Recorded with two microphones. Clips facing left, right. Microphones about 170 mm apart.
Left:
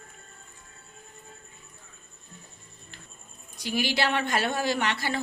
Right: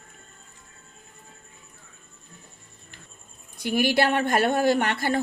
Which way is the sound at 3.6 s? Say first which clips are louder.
Right 6 dB; 55° right (ahead or behind).